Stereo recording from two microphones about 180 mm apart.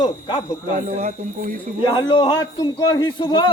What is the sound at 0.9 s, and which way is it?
Speech, 40° right (ahead or behind).